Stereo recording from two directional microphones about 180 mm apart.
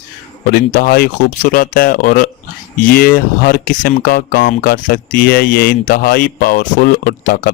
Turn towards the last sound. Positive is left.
turn(degrees=55)  # may be behind; listen again after turning